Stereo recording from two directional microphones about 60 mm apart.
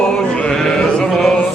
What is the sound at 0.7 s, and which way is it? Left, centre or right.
Chant, centre.